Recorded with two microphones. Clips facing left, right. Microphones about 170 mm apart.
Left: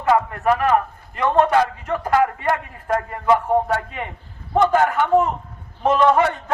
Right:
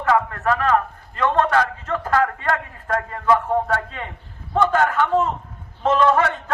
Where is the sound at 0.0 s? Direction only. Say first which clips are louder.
Left 2 dB; 20° left (ahead or behind).